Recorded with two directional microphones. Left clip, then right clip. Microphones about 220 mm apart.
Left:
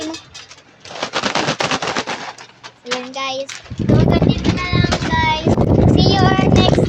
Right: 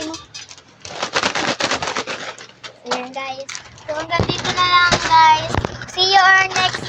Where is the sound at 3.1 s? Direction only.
30° left (ahead or behind).